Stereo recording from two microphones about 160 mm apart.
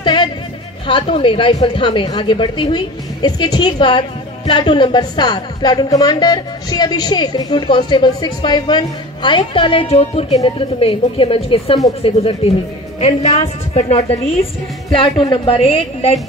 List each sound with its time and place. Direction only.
0.0 s music: 30° left (ahead or behind)
0.8 s a woman's voice: 35° left (ahead or behind)